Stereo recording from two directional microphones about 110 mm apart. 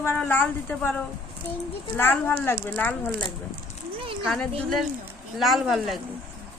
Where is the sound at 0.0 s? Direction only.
20° left (ahead or behind).